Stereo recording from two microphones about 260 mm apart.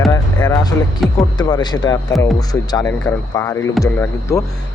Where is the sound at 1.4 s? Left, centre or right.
Centre.